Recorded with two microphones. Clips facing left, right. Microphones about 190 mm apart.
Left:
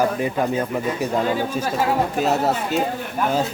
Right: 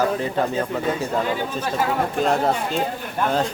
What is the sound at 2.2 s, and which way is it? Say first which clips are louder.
Speech: even; 5° left (ahead or behind).